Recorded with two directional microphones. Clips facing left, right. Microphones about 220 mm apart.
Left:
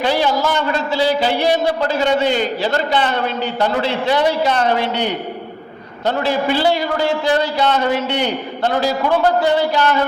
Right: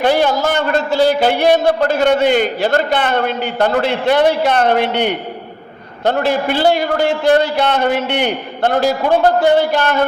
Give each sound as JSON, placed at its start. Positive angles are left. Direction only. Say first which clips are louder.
{"t": 0.0, "sound": "a man's voice", "louder": "right 3 dB", "side_deg": -50}